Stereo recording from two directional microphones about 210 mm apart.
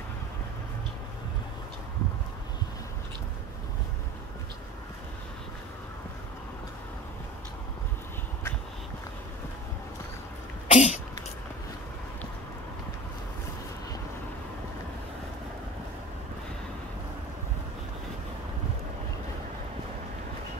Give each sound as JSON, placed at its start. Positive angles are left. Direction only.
{"t": 10.7, "sound": "throat clearing", "side_deg": 30}